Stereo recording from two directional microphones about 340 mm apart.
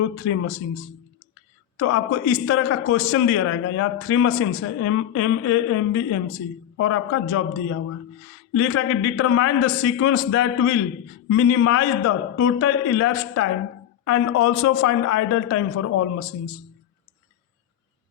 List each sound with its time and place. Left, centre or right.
0.0 s a man's voice: left
1.8 s a man's voice: left